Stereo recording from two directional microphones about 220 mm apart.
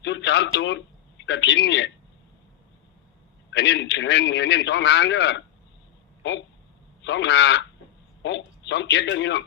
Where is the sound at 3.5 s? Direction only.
50° left (ahead or behind).